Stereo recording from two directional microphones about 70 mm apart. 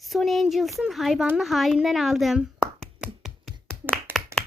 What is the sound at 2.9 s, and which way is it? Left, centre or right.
Finger snapping, centre.